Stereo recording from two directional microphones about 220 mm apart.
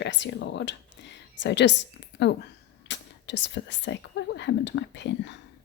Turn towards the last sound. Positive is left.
turn(degrees=55)  # may be behind; listen again after turning